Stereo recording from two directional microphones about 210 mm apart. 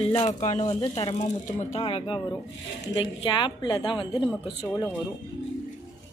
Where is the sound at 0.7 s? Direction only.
20° left (ahead or behind).